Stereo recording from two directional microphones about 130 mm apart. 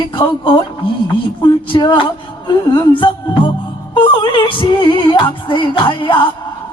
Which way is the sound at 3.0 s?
40° left (ahead or behind).